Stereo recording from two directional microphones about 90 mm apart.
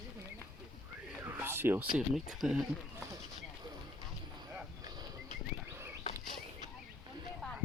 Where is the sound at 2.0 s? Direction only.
5° right (ahead or behind).